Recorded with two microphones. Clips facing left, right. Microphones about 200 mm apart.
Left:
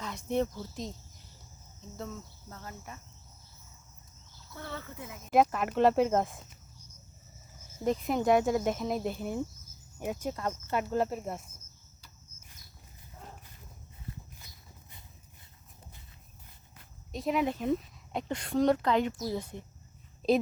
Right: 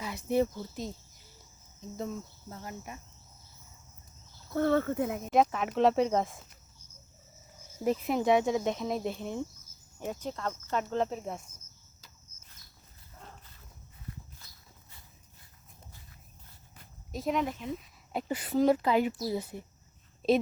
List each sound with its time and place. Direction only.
0.0 s cricket: 5° right (ahead or behind)
0.6 s speech: centre (ahead or behind)
2.5 s cricket: 15° right (ahead or behind)
4.5 s speech: 55° right (ahead or behind)
5.3 s speech: centre (ahead or behind)
7.9 s speech: centre (ahead or behind)
14.3 s walk: 15° left (ahead or behind)
17.1 s speech: centre (ahead or behind)